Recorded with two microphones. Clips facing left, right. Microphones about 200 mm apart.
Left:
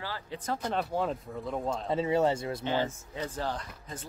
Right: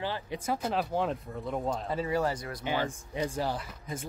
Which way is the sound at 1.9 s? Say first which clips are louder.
Left 6 dB; 25° left (ahead or behind).